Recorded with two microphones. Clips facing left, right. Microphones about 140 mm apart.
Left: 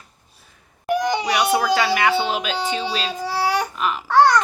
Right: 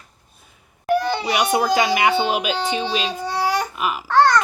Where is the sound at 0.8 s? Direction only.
15° left (ahead or behind).